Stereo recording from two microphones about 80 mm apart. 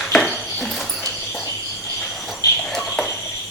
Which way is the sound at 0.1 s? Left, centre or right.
Centre.